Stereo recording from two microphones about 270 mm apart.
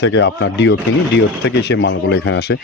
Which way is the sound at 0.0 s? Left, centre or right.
Left.